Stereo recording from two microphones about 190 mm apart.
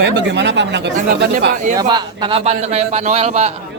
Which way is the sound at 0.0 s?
65° right (ahead or behind).